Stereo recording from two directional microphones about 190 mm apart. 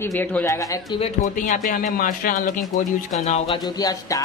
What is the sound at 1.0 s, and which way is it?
Speech, 45° left (ahead or behind).